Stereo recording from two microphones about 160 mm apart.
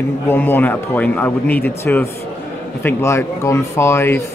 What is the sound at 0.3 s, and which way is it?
Speech, 10° left (ahead or behind).